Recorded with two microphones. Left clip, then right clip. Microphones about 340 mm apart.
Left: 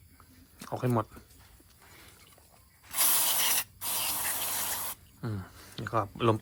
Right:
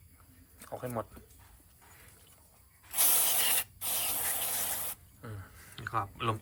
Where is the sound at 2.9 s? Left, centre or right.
Centre.